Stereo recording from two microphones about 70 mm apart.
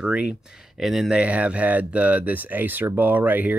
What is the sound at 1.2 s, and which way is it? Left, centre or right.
Speech, centre.